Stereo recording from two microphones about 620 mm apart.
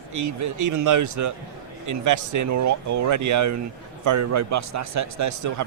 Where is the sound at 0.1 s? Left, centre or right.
Right.